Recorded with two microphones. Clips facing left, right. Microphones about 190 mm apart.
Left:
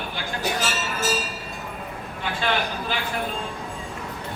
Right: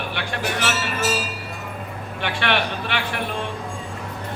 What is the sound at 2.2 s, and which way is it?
A man's voice, 75° right (ahead or behind).